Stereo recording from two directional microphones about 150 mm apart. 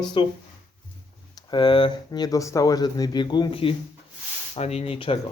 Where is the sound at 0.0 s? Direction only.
30° left (ahead or behind).